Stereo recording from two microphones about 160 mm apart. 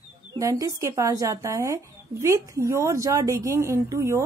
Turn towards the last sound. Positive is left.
turn(degrees=-20)  # may be behind; listen again after turning